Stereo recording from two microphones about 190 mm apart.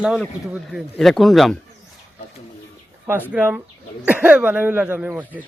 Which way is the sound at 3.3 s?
10° right (ahead or behind).